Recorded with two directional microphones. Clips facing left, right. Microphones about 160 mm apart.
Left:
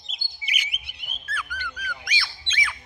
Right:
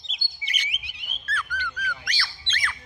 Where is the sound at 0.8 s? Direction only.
50° left (ahead or behind).